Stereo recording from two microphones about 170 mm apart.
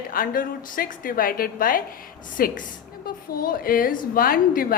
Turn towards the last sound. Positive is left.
turn(degrees=60)  # may be behind; listen again after turning